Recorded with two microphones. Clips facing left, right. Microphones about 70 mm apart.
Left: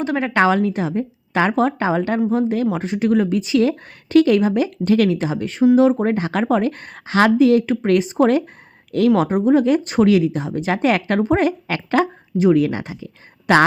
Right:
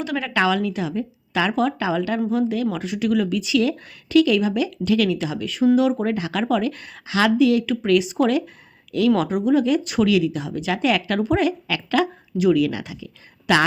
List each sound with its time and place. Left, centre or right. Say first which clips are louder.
0.0 s speech: left 4 dB; left